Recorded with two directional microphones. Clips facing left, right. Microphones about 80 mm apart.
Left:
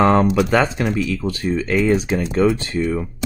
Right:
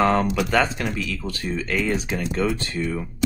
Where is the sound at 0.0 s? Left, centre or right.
Centre.